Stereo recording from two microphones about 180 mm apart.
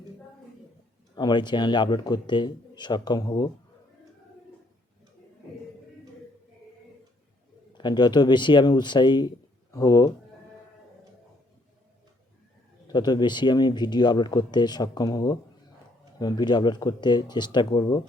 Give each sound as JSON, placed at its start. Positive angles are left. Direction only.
{"t": 1.1, "sound": "speech", "side_deg": 25}
{"t": 7.7, "sound": "speech", "side_deg": 25}
{"t": 12.9, "sound": "speech", "side_deg": 25}